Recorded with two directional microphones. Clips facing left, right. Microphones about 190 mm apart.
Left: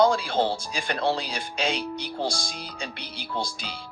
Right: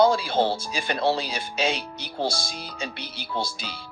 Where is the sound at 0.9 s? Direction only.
10° right (ahead or behind).